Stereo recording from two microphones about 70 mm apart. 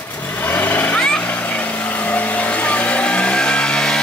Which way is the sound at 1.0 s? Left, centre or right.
Centre.